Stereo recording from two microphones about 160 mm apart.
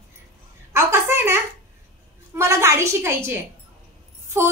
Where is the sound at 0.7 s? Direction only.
15° right (ahead or behind).